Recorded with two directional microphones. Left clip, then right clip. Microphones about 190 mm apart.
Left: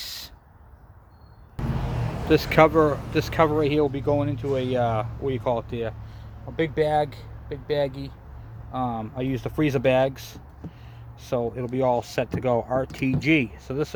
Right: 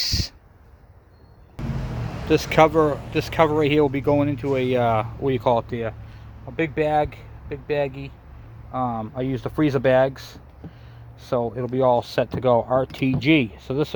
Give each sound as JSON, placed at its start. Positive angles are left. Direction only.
{"t": 0.0, "sound": "a sound", "side_deg": -30}
{"t": 2.2, "sound": "speech", "side_deg": 0}
{"t": 3.7, "sound": "speech", "side_deg": -30}
{"t": 6.6, "sound": "speech", "side_deg": -30}